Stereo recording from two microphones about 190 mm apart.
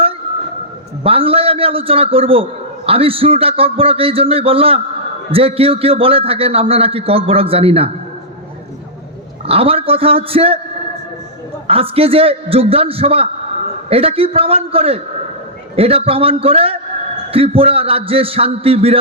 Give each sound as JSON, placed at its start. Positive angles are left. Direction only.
{"t": 1.0, "sound": "a man's voice", "side_deg": -30}
{"t": 9.5, "sound": "a man's voice", "side_deg": -30}
{"t": 11.7, "sound": "a man's voice", "side_deg": -30}